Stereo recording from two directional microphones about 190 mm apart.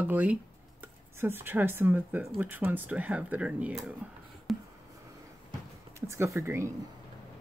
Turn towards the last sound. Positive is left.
turn(degrees=-15)  # may be behind; listen again after turning